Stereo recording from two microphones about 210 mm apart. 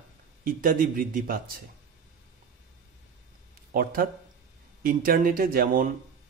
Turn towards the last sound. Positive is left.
turn(degrees=-45)  # may be behind; listen again after turning